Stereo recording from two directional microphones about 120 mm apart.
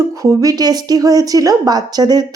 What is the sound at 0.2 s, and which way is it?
A woman's voice, 30° right (ahead or behind).